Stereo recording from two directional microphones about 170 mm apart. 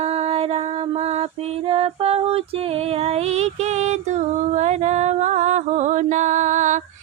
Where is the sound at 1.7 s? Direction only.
35° right (ahead or behind).